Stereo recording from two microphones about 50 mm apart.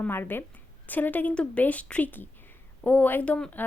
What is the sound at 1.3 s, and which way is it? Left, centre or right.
Speech, left.